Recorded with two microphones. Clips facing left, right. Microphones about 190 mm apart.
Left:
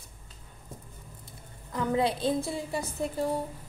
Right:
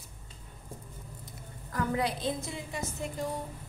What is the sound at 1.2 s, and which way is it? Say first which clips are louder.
A woman's voice: right 2 dB; 20° left (ahead or behind).